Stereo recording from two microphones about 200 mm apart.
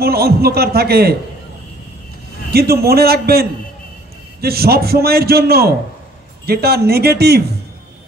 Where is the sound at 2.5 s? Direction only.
50° right (ahead or behind).